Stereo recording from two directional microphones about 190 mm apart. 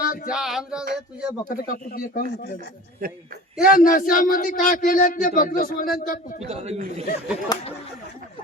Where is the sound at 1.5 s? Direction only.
45° left (ahead or behind).